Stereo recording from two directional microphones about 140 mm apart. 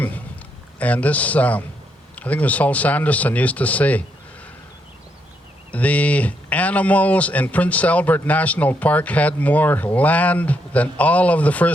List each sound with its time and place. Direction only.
0.8 s speech: 10° left (ahead or behind)
5.7 s speech: 10° left (ahead or behind)